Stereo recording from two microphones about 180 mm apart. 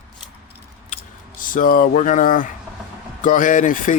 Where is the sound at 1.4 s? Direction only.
50° left (ahead or behind).